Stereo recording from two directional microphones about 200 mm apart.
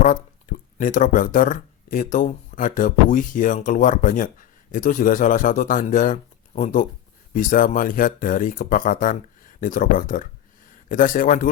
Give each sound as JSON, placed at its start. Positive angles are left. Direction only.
{"t": 0.0, "sound": "speech", "side_deg": 40}